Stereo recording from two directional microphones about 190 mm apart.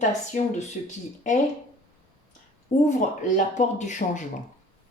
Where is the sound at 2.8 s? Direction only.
40° left (ahead or behind).